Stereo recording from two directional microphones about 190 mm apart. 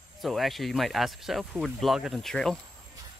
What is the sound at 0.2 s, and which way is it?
Speech, centre (ahead or behind).